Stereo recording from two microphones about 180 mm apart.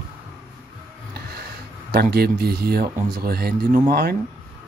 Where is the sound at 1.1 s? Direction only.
60° right (ahead or behind).